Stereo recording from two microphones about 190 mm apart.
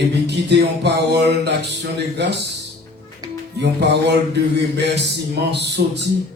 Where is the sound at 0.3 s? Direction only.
60° right (ahead or behind).